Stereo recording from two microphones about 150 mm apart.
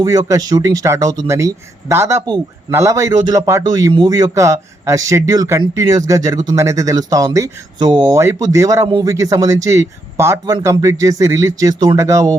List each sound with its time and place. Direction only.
0.0 s speech: 25° right (ahead or behind)